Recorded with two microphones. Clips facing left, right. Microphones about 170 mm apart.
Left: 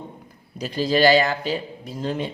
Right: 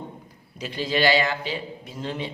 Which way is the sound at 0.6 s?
40° left (ahead or behind).